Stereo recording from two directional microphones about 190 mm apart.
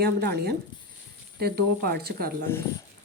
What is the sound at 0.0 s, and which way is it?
Speech, 60° right (ahead or behind).